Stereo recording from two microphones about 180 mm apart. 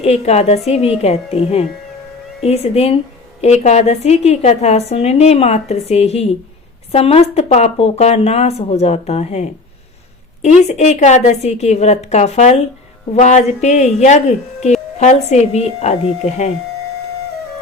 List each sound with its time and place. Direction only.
0.0 s speech: 35° left (ahead or behind)